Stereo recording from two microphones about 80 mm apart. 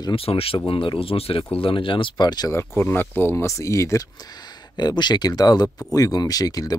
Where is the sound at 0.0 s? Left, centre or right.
Left.